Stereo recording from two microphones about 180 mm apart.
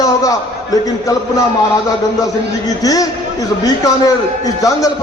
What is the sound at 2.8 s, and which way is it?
Speech, 20° left (ahead or behind).